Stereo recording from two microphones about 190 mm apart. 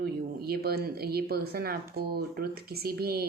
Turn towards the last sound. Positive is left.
turn(degrees=-55)  # may be behind; listen again after turning